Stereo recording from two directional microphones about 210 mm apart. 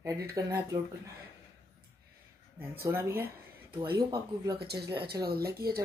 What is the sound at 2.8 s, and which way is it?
Speech, 10° right (ahead or behind).